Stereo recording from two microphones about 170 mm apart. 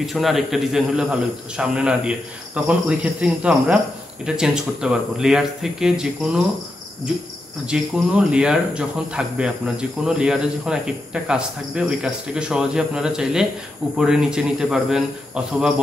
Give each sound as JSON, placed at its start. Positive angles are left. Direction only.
{"t": 0.0, "sound": "speech", "side_deg": 0}
{"t": 7.6, "sound": "speech", "side_deg": -5}